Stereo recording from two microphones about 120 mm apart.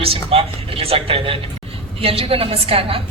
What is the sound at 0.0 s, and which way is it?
A woman's voice, 50° right (ahead or behind).